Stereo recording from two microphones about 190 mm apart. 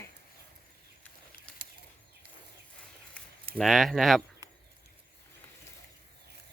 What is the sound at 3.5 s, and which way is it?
Speech, centre (ahead or behind).